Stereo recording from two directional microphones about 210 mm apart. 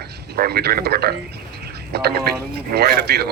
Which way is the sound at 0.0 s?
50° right (ahead or behind).